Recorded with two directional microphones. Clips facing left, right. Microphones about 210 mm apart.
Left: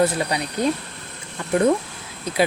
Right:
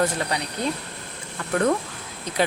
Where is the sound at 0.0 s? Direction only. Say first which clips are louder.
Left 4 dB; 15° left (ahead or behind).